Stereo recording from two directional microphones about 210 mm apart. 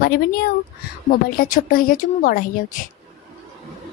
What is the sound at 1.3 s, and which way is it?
A woman's voice, 45° left (ahead or behind).